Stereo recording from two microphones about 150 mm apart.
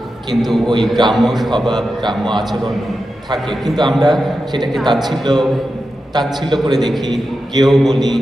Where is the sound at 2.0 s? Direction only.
30° right (ahead or behind).